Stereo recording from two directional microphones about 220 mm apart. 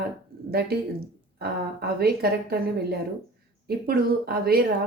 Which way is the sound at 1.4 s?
45° right (ahead or behind).